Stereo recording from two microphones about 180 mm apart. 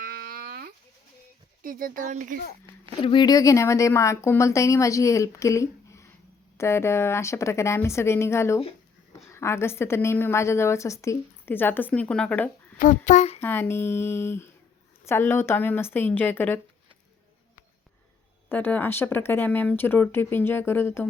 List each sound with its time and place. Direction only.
0.0 s a sound: 55° right (ahead or behind)
1.6 s speech: 50° right (ahead or behind)
3.0 s a woman's voice: 25° left (ahead or behind); by 12.5 s 5° left (ahead or behind)
12.8 s a sound: 45° left (ahead or behind)
13.4 s a woman's voice: 10° left (ahead or behind)
18.4 s a woman's voice: 10° left (ahead or behind)